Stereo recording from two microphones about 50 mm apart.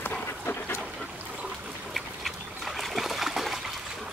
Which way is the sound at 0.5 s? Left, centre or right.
Left.